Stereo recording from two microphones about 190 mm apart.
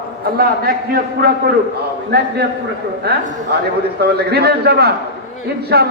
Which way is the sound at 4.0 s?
60° right (ahead or behind).